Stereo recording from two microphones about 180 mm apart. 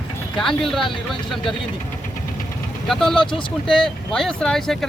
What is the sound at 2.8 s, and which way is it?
Speech, 5° left (ahead or behind).